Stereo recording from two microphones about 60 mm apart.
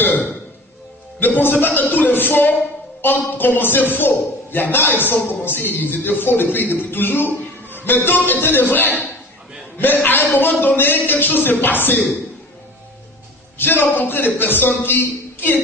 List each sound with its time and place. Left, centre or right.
0.0 s a sound: left
1.2 s a man's voice: left
13.6 s a man's voice: left